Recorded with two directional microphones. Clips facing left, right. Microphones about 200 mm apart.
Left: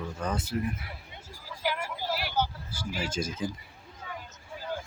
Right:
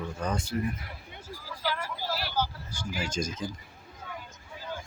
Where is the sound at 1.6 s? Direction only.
20° left (ahead or behind).